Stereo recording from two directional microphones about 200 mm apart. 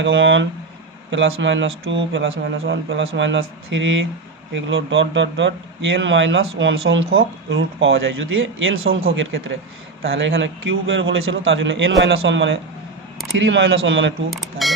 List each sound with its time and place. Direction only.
0.0 s speech: 70° right (ahead or behind); by 9.0 s 90° right
9.1 s speech: 75° right (ahead or behind)
14.3 s speech: centre (ahead or behind)